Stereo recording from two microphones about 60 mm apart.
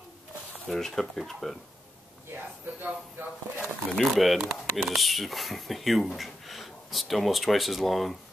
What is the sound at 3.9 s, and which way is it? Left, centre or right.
Speech, centre.